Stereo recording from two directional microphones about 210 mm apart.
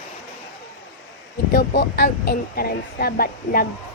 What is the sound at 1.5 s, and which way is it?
Speech, 45° left (ahead or behind).